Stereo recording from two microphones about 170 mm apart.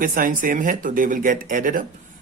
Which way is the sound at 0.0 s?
55° right (ahead or behind).